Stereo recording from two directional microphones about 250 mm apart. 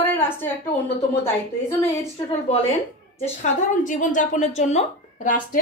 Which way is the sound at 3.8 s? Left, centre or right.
Left.